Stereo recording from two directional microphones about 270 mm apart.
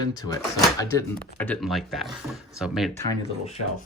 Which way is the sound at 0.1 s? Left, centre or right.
Centre.